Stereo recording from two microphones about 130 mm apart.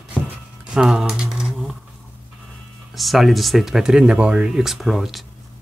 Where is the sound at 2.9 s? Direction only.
Centre (ahead or behind).